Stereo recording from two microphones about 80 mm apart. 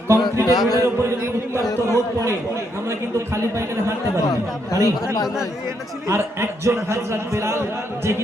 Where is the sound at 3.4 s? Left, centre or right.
Right.